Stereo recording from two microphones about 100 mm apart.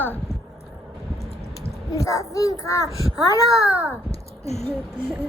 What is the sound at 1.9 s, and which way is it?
A child's voice, 30° left (ahead or behind).